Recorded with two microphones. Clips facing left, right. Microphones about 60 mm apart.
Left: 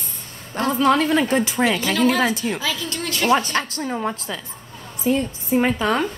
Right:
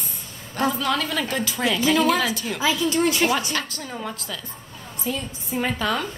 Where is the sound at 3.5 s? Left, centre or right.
Left.